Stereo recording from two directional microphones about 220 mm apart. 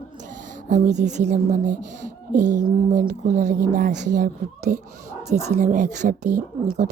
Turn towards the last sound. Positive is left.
turn(degrees=-35)  # may be behind; listen again after turning